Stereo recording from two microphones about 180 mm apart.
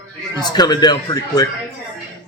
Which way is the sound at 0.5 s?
25° left (ahead or behind).